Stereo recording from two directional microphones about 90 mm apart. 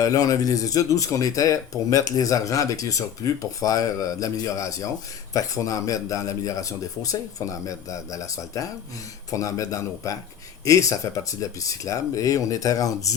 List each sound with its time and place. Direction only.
0.0 s speech: 40° left (ahead or behind)